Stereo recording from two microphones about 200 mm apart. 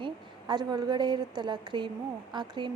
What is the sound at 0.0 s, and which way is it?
A woman's voice, 20° right (ahead or behind).